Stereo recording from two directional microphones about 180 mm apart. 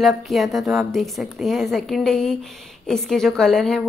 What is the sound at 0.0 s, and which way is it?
Speech, centre (ahead or behind).